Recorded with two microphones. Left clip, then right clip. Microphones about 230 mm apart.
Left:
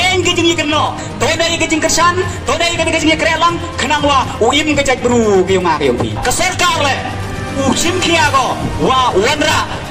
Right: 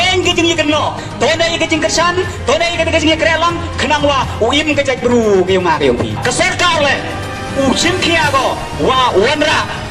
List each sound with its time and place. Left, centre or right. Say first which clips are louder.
0.0 s speech: even; left